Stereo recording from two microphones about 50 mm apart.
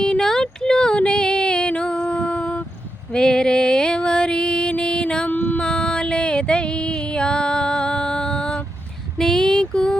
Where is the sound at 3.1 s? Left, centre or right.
Centre.